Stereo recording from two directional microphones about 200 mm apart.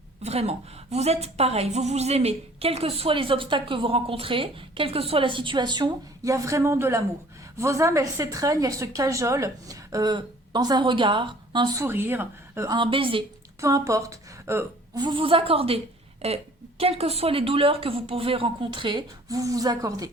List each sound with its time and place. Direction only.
0.2 s a woman's voice: 30° right (ahead or behind)
13.6 s a woman's voice: 15° right (ahead or behind)